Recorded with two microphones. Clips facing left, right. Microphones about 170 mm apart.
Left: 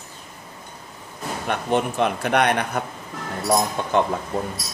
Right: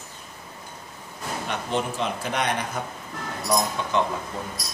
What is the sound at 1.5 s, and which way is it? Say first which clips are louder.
A man's voice: left 6 dB; 60° left (ahead or behind).